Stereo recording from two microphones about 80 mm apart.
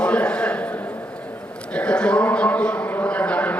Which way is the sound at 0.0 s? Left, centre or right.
Centre.